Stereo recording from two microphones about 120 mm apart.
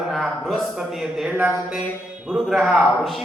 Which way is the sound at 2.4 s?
Centre (ahead or behind).